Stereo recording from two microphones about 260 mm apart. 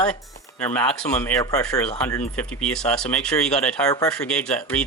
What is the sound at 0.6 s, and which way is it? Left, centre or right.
Speech, centre.